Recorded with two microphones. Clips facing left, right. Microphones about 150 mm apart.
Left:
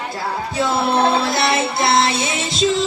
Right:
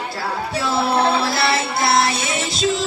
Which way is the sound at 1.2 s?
20° left (ahead or behind).